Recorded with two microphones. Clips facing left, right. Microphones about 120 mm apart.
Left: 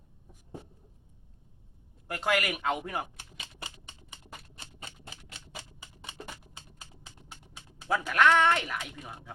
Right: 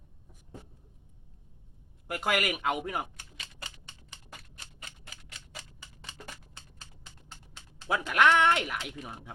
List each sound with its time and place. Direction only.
2.0 s speech: 10° right (ahead or behind)
3.2 s typewriter: 25° left (ahead or behind)
5.8 s a sound: 20° left (ahead or behind)
8.1 s speech: 15° right (ahead or behind)
8.8 s speech: centre (ahead or behind)